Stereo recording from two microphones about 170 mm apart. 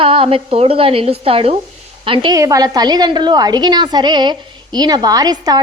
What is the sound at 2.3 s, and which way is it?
A woman's voice, 20° right (ahead or behind).